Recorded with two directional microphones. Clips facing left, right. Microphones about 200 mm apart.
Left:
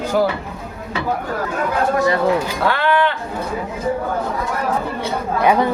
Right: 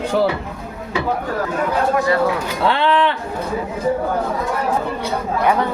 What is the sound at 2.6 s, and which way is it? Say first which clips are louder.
Speech: right 1 dB; 25° right (ahead or behind).